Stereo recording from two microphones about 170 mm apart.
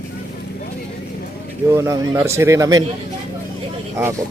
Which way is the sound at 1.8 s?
15° right (ahead or behind).